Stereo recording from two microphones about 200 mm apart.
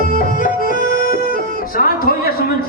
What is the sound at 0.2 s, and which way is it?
Music, 45° left (ahead or behind).